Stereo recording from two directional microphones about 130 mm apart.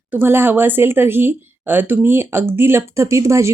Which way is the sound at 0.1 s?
15° right (ahead or behind).